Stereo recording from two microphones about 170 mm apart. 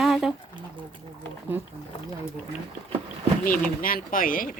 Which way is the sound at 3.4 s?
55° left (ahead or behind).